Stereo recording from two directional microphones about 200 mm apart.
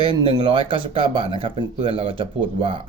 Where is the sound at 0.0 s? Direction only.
25° right (ahead or behind).